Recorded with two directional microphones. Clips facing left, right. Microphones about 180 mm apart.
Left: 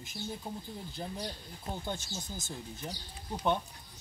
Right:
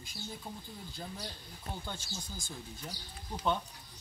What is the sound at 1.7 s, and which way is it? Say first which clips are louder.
Speech: left 4 dB; 20° left (ahead or behind).